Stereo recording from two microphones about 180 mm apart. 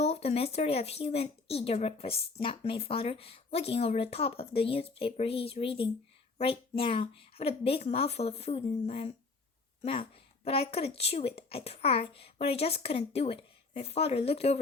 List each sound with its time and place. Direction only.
0.0 s speech: 35° left (ahead or behind)